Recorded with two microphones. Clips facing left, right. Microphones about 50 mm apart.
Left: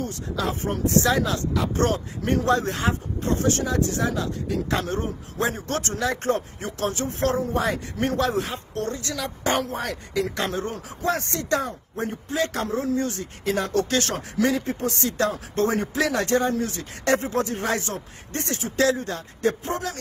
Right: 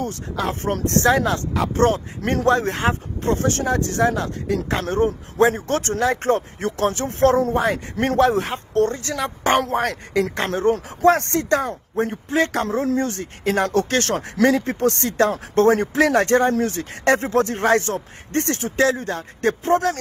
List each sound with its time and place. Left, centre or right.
0.0 s speech: right
1.7 s speech: right
10.3 s speech: right
18.8 s speech: right